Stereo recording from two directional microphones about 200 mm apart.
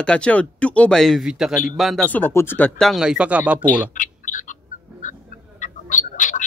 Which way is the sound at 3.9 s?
40° left (ahead or behind).